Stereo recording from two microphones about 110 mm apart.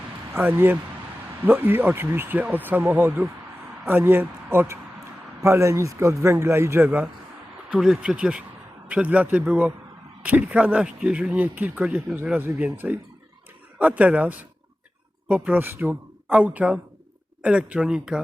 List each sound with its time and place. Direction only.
0.3 s speech: 20° right (ahead or behind)
15.4 s speech: 15° right (ahead or behind)